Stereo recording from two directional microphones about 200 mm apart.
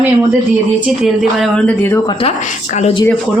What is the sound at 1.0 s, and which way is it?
Speech, centre (ahead or behind).